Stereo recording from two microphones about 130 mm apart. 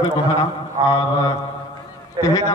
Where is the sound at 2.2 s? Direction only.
25° left (ahead or behind).